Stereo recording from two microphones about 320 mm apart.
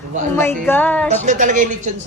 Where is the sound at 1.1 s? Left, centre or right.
Right.